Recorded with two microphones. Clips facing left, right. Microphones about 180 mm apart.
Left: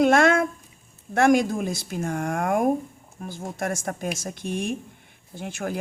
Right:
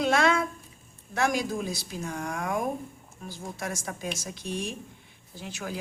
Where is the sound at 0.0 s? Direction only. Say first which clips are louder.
Left 6 dB; 50° left (ahead or behind).